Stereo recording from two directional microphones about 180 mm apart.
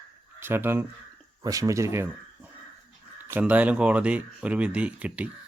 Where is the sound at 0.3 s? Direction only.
10° right (ahead or behind).